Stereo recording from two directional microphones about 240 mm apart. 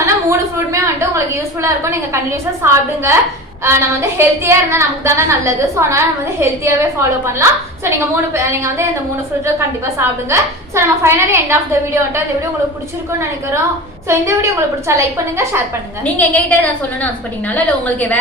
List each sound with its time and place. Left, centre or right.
0.0 s a sound: centre
3.6 s a woman's voice: centre
14.1 s a woman's voice: centre
16.1 s a woman's voice: centre